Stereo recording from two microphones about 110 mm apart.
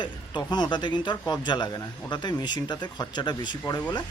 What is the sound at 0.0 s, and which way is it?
Speech, 40° left (ahead or behind).